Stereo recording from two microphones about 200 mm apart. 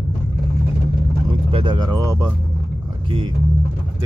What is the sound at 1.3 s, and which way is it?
Speech, 25° right (ahead or behind).